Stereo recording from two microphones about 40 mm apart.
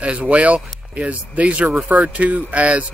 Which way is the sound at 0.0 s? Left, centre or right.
Right.